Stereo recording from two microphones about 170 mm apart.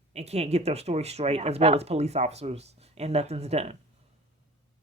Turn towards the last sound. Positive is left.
turn(degrees=-40)  # may be behind; listen again after turning